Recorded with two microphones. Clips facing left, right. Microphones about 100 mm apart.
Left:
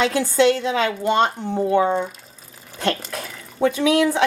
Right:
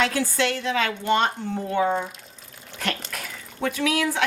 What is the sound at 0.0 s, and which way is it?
A woman's voice, 20° left (ahead or behind).